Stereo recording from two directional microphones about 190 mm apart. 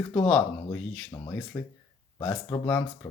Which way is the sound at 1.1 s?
20° left (ahead or behind).